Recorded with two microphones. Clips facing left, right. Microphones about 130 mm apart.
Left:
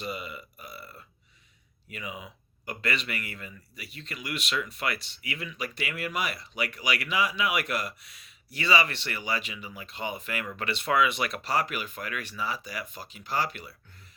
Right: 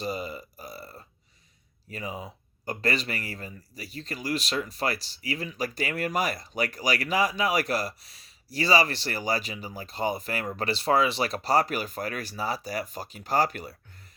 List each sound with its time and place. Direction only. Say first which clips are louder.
0.0 s speech: right 4 dB; 35° right (ahead or behind)